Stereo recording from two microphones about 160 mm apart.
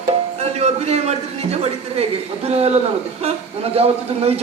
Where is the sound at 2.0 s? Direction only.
40° right (ahead or behind).